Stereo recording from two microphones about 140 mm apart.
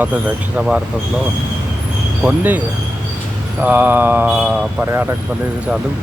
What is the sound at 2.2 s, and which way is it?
Mantra, 10° right (ahead or behind).